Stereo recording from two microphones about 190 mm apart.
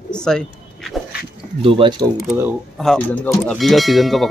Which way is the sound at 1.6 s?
25° right (ahead or behind).